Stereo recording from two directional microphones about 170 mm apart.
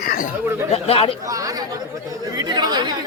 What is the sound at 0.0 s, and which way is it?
Chatter, 60° left (ahead or behind).